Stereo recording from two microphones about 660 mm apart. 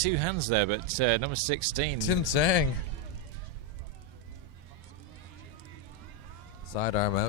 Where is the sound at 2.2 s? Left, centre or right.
Left.